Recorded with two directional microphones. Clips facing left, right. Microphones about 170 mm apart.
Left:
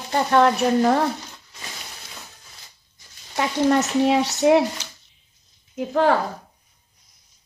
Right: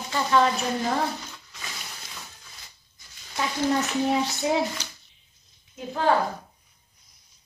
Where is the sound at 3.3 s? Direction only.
70° left (ahead or behind).